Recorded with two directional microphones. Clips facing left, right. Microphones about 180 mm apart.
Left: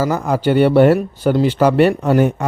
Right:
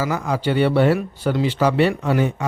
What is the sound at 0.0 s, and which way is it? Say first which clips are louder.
Speech: left 5 dB; 45° left (ahead or behind).